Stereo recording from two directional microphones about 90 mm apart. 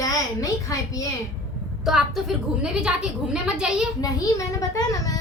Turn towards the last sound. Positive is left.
turn(degrees=40)  # may be behind; listen again after turning